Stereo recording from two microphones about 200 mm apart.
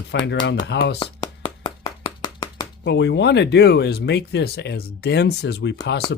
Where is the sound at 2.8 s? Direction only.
60° left (ahead or behind).